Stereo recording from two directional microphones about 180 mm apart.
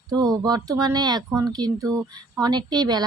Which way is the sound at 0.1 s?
20° right (ahead or behind).